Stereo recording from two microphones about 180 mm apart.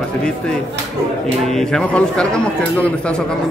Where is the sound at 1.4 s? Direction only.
Centre (ahead or behind).